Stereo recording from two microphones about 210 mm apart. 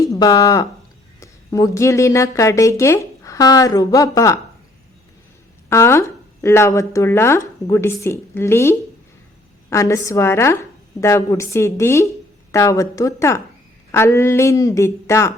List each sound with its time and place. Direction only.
0.0 s speech: 15° left (ahead or behind)
5.6 s speech: 10° left (ahead or behind)